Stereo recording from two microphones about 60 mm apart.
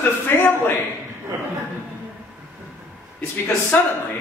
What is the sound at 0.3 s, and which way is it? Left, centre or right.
Speech, left.